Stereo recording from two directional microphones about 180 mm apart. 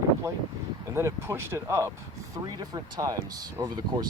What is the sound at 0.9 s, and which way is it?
Speech, 15° right (ahead or behind).